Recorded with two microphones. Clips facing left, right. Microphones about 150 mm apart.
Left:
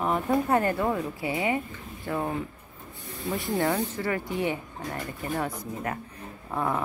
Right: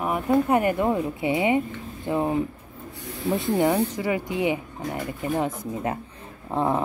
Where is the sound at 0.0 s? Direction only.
10° right (ahead or behind).